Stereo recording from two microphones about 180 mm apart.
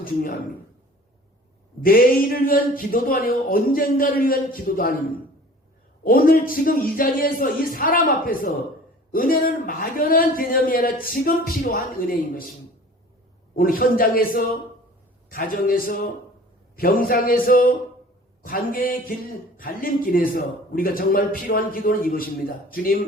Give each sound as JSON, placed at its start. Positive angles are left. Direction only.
{"t": 0.0, "sound": "a woman's voice", "side_deg": 50}
{"t": 1.8, "sound": "a man's voice", "side_deg": 55}
{"t": 6.1, "sound": "a man's voice", "side_deg": 55}
{"t": 13.6, "sound": "a man's voice", "side_deg": 50}